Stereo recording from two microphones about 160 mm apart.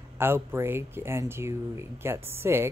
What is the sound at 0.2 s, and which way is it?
Speech, 15° right (ahead or behind).